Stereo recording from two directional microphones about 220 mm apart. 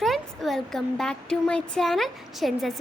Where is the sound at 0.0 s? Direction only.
Centre (ahead or behind).